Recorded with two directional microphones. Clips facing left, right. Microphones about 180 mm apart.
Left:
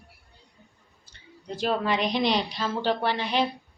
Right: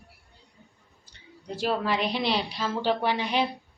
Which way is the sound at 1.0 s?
15° right (ahead or behind).